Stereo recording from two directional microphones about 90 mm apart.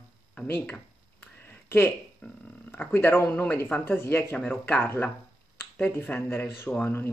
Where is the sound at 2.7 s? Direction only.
20° left (ahead or behind).